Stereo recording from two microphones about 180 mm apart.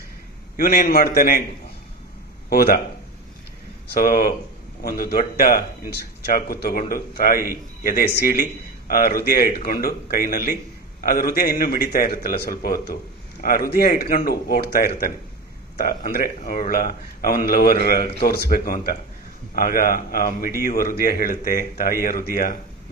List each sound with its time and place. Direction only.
0.5 s speech: 55° left (ahead or behind)
2.5 s speech: 60° left (ahead or behind)
3.8 s a man's voice: 55° left (ahead or behind)